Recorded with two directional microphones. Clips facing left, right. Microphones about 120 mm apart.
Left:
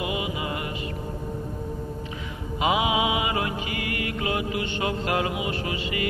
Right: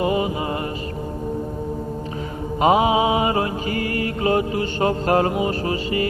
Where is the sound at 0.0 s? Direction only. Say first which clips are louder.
Right 8 dB; 40° right (ahead or behind).